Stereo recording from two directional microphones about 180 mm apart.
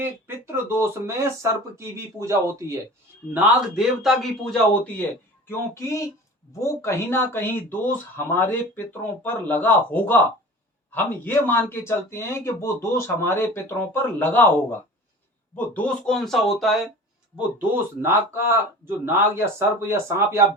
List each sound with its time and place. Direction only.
0.0 s speech: 10° right (ahead or behind)
3.3 s a man's voice: centre (ahead or behind)
5.5 s a man's voice: 15° left (ahead or behind); by 16.9 s centre (ahead or behind)
17.3 s speech: 10° right (ahead or behind)